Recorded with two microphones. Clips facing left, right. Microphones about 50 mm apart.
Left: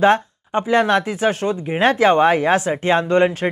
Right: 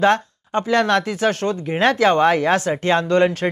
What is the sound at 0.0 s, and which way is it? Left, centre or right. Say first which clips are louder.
Speech: left 2 dB; centre.